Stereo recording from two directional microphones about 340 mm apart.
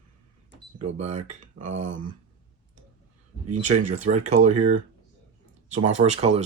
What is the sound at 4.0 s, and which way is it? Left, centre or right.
Speech, centre.